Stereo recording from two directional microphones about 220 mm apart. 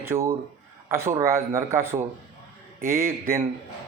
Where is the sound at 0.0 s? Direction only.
10° right (ahead or behind).